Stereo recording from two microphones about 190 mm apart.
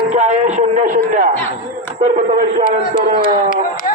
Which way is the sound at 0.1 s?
35° right (ahead or behind).